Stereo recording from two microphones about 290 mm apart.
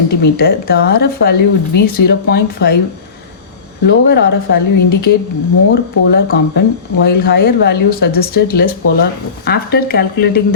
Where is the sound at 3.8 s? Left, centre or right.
Left.